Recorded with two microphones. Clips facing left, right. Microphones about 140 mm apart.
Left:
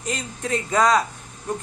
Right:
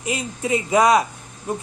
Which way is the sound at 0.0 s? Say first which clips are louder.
Right 3 dB; 10° right (ahead or behind).